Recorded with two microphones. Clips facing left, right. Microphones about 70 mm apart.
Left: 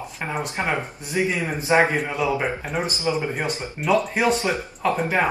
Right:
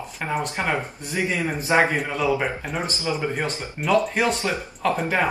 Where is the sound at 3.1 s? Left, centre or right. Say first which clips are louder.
Even; centre.